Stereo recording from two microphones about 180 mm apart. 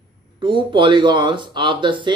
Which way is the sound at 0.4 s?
25° right (ahead or behind).